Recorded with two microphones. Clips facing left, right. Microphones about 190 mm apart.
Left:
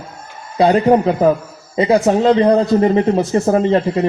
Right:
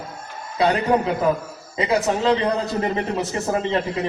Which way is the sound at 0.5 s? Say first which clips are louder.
Left 7 dB; 35° left (ahead or behind).